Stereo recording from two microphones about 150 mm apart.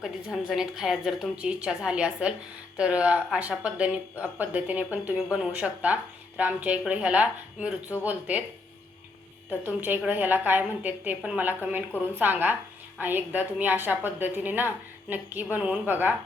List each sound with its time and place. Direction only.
0.0 s a woman's voice: 5° right (ahead or behind)
9.6 s speech: 10° right (ahead or behind)